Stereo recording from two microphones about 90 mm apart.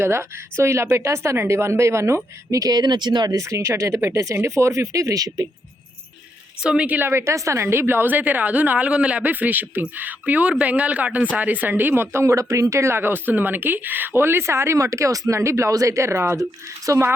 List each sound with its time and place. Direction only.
0.0 s speech: 30° right (ahead or behind); by 3.3 s 55° right (ahead or behind)
3.3 s speech: 35° right (ahead or behind)
6.6 s a woman's voice: 10° right (ahead or behind); by 17.1 s 35° right (ahead or behind)